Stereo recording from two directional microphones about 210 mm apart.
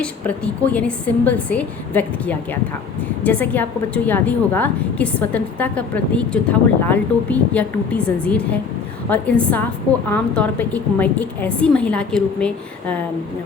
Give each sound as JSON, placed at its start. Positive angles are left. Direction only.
{"t": 0.0, "sound": "a woman's voice", "side_deg": 5}